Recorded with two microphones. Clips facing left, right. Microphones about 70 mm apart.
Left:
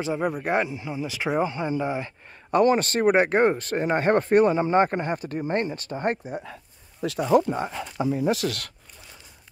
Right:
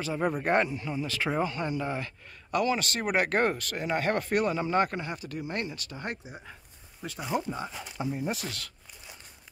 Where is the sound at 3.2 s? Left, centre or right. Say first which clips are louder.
Left 6 dB; left.